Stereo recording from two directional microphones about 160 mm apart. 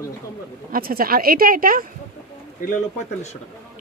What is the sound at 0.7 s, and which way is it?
Speech, 65° right (ahead or behind).